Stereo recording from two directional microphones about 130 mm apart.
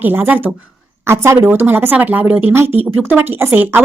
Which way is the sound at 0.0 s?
15° right (ahead or behind).